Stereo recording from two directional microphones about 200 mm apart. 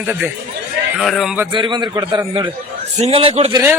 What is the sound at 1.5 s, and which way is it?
A man's voice, 25° right (ahead or behind).